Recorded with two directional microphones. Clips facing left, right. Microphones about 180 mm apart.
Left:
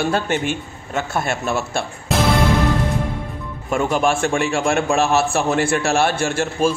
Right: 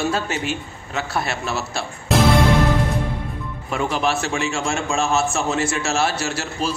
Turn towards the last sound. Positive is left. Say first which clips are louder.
# left 6 dB
turn(degrees=50)  # may be behind; listen again after turning